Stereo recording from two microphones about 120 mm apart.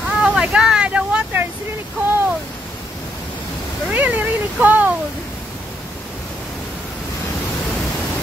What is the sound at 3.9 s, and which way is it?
Speech, 15° right (ahead or behind).